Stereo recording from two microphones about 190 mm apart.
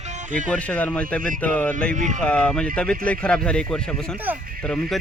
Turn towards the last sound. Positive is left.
turn(degrees=5)  # may be behind; listen again after turning